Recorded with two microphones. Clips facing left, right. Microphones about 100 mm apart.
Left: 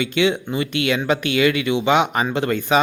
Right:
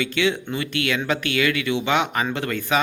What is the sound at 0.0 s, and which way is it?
Speech, 20° left (ahead or behind).